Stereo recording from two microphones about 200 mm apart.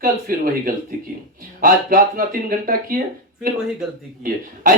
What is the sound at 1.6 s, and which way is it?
Speech, 45° right (ahead or behind).